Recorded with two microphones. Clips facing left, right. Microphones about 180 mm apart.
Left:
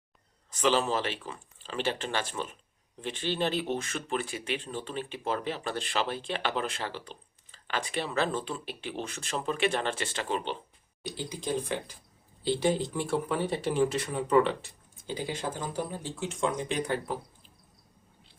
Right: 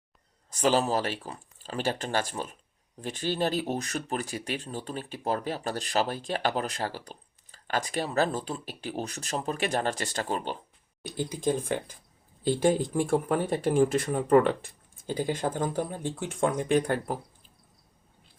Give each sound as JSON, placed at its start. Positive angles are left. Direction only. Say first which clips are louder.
{"t": 0.5, "sound": "speech", "louder": "right 2 dB", "side_deg": -40}